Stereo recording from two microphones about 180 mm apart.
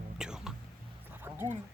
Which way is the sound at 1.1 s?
10° right (ahead or behind).